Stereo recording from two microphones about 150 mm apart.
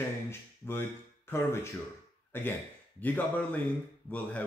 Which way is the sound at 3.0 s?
10° left (ahead or behind).